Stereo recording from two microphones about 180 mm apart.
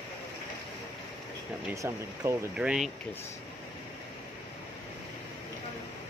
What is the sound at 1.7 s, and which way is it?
Speech, 15° right (ahead or behind).